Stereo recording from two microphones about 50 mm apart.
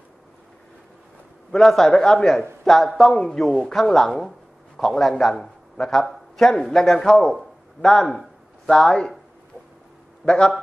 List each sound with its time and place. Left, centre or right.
1.5 s speech: centre
4.9 s a man's voice: centre
7.8 s a sound: centre
8.7 s speech: centre
10.2 s speech: centre